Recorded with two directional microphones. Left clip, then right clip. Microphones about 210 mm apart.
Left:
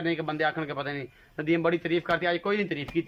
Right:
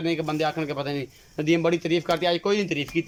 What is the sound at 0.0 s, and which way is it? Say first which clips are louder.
A man's voice: right 2 dB; 5° right (ahead or behind).